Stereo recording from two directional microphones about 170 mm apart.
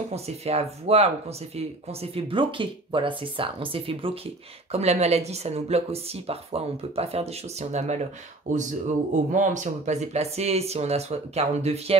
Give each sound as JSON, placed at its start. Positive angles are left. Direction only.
{"t": 0.1, "sound": "speech", "side_deg": -40}